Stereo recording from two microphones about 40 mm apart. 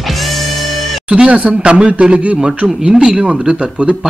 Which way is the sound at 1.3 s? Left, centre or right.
Right.